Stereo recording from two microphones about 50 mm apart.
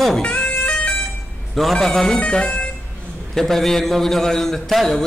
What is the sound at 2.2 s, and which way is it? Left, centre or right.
Speech, left.